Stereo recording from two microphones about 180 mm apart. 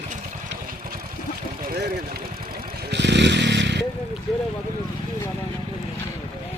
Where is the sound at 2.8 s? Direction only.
75° right (ahead or behind).